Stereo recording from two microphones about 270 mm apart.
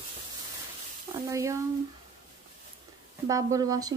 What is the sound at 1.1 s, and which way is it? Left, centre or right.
Sizzle, centre.